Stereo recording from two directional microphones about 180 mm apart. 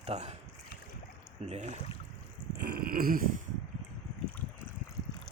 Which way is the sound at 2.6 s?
55° right (ahead or behind).